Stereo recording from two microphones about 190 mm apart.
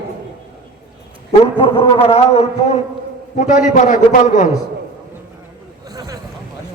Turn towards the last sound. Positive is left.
turn(degrees=-20)  # may be behind; listen again after turning